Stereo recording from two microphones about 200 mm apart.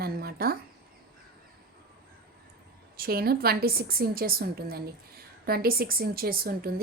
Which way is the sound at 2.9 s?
50° right (ahead or behind).